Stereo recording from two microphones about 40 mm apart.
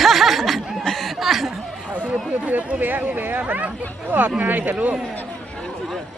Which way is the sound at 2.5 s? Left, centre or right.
Right.